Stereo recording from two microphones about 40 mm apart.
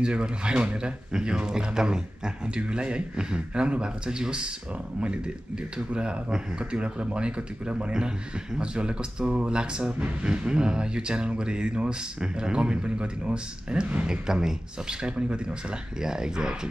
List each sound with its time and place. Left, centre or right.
0.0 s speech: right
14.0 s speech: centre
16.0 s speech: centre